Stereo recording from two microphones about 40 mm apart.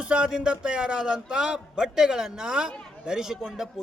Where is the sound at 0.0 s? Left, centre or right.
Right.